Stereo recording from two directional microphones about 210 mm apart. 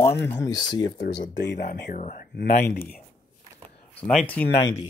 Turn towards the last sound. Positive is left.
turn(degrees=5)  # may be behind; listen again after turning